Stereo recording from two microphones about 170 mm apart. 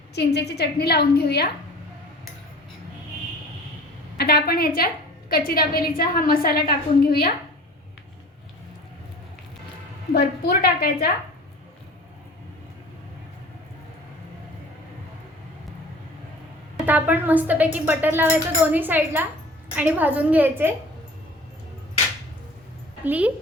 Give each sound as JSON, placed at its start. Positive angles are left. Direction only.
{"t": 0.1, "sound": "a woman's voice", "side_deg": 75}
{"t": 4.2, "sound": "a woman's voice", "side_deg": 65}
{"t": 10.2, "sound": "a woman's voice", "side_deg": 65}
{"t": 16.7, "sound": "a woman's voice", "side_deg": -10}
{"t": 23.0, "sound": "a woman's voice", "side_deg": -10}